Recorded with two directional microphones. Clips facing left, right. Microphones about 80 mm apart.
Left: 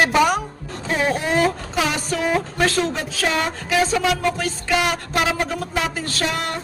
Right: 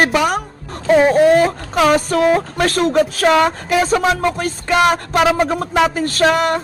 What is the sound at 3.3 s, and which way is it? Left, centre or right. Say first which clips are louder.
Speech: right 9 dB; right.